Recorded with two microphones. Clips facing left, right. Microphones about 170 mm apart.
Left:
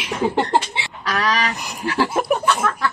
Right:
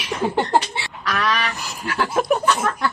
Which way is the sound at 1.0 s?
40° left (ahead or behind).